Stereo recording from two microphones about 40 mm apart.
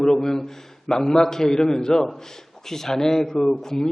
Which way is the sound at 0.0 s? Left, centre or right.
Centre.